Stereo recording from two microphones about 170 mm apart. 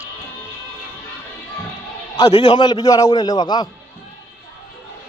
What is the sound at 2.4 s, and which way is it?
A man's voice, 25° left (ahead or behind).